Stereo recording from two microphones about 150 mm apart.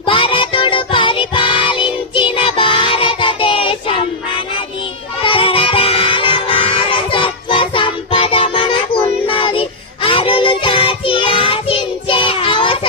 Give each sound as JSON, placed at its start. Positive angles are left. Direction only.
{"t": 0.0, "sound": "music", "side_deg": 35}
{"t": 5.2, "sound": "music", "side_deg": 35}